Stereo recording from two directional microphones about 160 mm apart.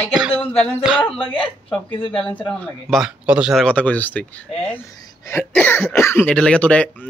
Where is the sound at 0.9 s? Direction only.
5° right (ahead or behind).